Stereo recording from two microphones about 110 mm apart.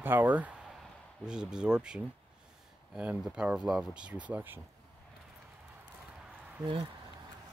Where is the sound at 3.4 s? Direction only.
10° right (ahead or behind).